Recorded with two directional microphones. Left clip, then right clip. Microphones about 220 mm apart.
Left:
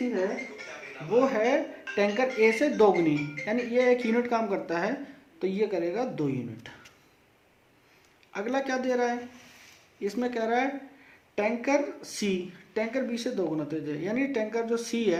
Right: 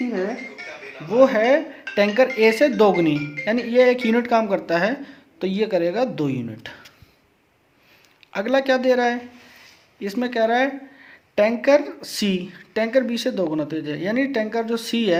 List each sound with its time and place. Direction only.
1.2 s speech: 40° right (ahead or behind)
8.3 s speech: 40° right (ahead or behind)